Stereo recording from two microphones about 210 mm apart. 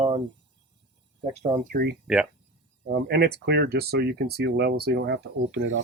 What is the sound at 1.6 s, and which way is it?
Speech, 50° right (ahead or behind).